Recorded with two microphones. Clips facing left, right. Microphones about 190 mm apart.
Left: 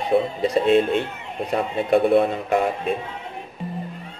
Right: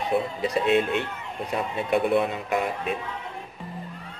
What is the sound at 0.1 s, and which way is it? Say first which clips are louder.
A man's voice: left 6 dB; 30° left (ahead or behind).